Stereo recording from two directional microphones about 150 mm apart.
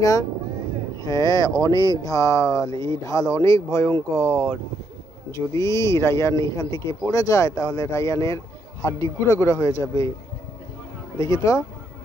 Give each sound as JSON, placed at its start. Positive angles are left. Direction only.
{"t": 0.9, "sound": "speech", "side_deg": 25}
{"t": 11.1, "sound": "speech", "side_deg": 20}